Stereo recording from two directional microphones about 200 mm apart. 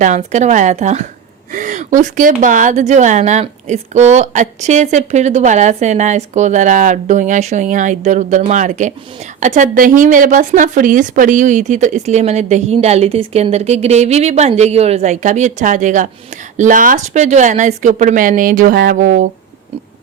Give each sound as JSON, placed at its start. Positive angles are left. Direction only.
{"t": 0.0, "sound": "a woman's voice", "side_deg": -35}